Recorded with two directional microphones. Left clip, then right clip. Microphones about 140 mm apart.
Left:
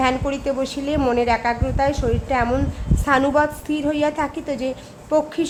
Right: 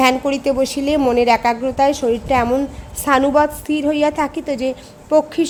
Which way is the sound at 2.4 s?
15° right (ahead or behind).